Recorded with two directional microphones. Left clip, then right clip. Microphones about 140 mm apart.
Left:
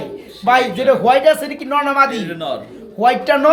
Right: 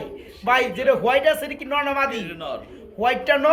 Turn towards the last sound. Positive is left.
turn(degrees=5)  # may be behind; listen again after turning